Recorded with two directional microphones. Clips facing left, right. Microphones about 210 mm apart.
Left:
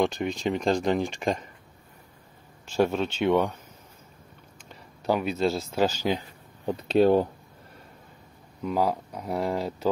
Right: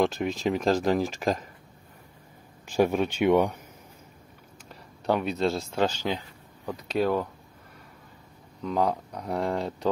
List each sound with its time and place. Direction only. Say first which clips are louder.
0.0 s speech: even; centre (ahead or behind)
2.7 s speech: right 1 dB; 10° right (ahead or behind)
4.6 s speech: even; centre (ahead or behind)
6.6 s speech: left 6 dB; 25° left (ahead or behind)
8.6 s speech: even; 5° left (ahead or behind)